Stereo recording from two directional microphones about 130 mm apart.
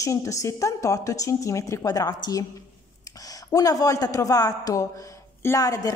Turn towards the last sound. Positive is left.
turn(degrees=25)  # may be behind; listen again after turning